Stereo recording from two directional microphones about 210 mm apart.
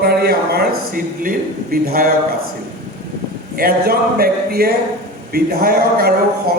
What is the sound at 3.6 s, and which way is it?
A man's voice, 45° right (ahead or behind).